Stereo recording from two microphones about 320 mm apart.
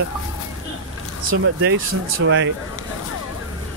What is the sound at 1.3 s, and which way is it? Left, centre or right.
Speech, right.